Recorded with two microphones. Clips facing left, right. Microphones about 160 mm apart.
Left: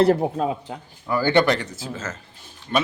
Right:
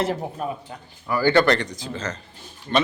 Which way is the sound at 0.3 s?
90° left.